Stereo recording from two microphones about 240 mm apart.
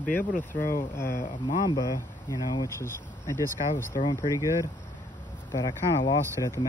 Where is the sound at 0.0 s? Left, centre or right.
Centre.